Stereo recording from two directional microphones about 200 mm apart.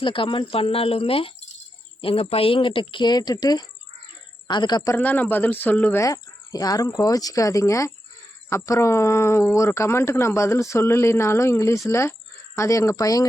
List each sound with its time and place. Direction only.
0.0 s speech: 25° left (ahead or behind)